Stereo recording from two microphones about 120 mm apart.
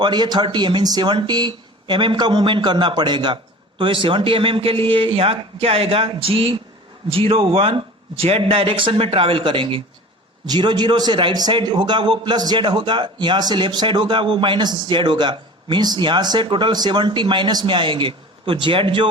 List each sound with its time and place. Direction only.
0.0 s a man's voice: 40° right (ahead or behind)